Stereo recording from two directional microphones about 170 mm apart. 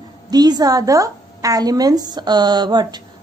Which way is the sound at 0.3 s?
25° right (ahead or behind).